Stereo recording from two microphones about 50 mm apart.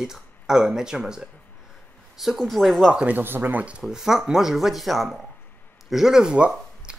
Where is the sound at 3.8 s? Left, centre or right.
Centre.